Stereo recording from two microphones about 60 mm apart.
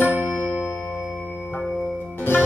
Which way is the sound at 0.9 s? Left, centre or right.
Centre.